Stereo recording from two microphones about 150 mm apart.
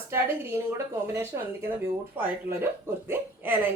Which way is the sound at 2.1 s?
15° right (ahead or behind).